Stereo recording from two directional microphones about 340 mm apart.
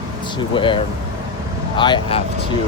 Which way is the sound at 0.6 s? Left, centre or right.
Centre.